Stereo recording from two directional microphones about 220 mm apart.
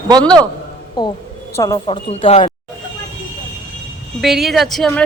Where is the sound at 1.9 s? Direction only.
30° left (ahead or behind).